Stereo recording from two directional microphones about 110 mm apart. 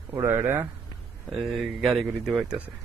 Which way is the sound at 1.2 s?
Centre (ahead or behind).